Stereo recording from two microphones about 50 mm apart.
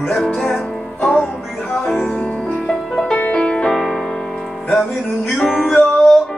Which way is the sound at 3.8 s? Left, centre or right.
Centre.